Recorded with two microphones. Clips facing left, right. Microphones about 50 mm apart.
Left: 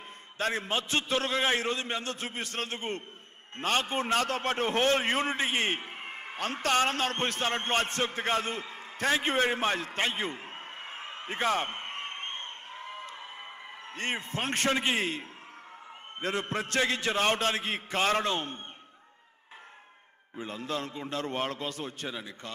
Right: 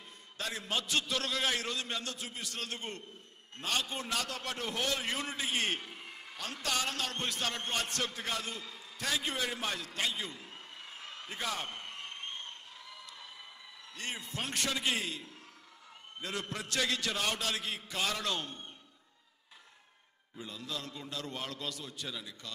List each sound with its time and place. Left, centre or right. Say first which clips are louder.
0.4 s a man's voice: left 6 dB; left
2.1 s a man's voice: left 6 dB; left
20.3 s a man's voice: left 7 dB; left